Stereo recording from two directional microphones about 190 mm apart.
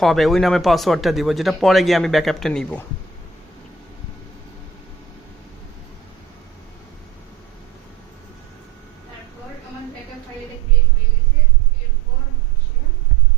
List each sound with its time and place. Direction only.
0.0 s speech: centre (ahead or behind)